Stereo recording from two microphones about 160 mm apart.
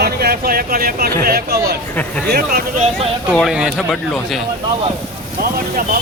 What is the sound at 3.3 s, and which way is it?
Speech, centre (ahead or behind).